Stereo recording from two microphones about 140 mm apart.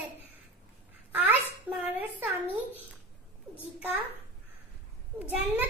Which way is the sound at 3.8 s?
10° right (ahead or behind).